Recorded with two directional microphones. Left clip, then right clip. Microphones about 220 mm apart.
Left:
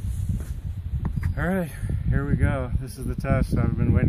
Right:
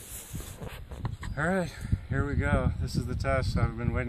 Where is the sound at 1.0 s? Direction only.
Centre (ahead or behind).